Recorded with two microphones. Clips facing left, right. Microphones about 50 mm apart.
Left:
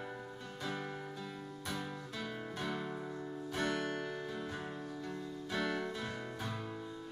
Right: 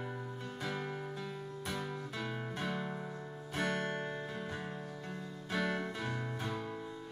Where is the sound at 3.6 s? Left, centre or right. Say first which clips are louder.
Right 1 dB; right.